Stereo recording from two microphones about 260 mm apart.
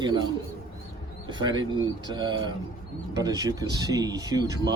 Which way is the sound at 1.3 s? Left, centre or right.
Centre.